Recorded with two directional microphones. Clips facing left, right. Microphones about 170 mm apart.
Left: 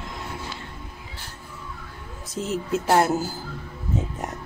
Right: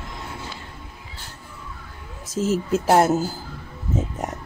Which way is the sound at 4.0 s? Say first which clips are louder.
Right 3 dB; 20° right (ahead or behind).